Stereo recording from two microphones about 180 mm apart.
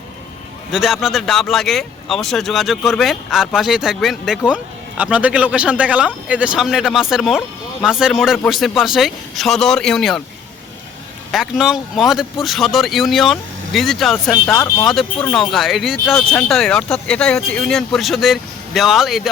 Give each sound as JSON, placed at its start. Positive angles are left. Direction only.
{"t": 0.7, "sound": "speech", "side_deg": 0}
{"t": 11.3, "sound": "speech", "side_deg": 0}
{"t": 14.5, "sound": "speech", "side_deg": 15}